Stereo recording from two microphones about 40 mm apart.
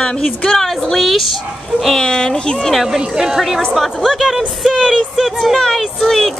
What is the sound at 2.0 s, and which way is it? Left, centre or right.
Speech, centre.